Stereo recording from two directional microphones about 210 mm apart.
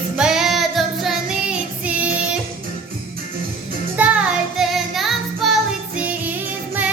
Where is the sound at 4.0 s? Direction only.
5° right (ahead or behind).